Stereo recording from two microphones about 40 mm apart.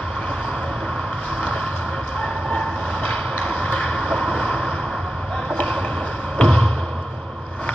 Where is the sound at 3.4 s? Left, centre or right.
Left.